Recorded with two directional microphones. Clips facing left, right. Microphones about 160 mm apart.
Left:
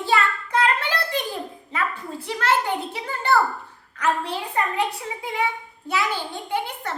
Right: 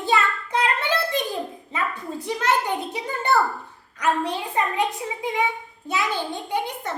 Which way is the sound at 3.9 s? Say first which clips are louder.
Right 1 dB; 15° right (ahead or behind).